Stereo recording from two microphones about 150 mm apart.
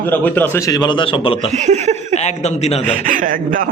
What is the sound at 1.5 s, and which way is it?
Speech, 50° right (ahead or behind).